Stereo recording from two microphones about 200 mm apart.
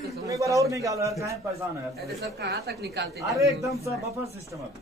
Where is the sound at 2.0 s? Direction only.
55° right (ahead or behind).